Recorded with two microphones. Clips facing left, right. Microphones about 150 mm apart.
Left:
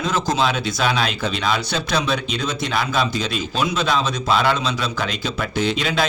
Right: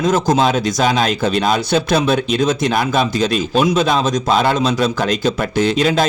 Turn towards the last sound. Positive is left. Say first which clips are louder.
# right 6 dB
turn(degrees=-45)  # may be behind; listen again after turning